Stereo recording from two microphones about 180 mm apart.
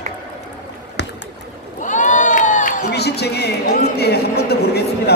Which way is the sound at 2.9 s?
65° left (ahead or behind).